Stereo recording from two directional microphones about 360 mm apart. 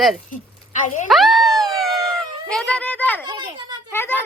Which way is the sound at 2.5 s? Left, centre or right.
Centre.